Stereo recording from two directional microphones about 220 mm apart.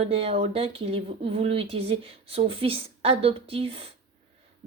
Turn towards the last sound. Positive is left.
turn(degrees=-25)  # may be behind; listen again after turning